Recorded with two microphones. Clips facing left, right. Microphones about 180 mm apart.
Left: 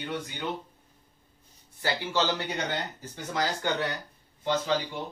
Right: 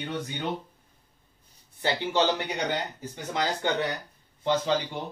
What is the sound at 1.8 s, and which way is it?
Speech, 20° right (ahead or behind).